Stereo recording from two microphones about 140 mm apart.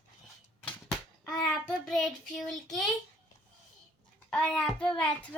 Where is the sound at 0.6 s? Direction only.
10° left (ahead or behind).